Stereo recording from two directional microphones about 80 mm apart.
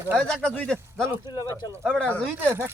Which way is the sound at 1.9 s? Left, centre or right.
Centre.